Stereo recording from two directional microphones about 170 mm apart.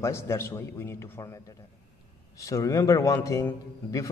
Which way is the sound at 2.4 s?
20° left (ahead or behind).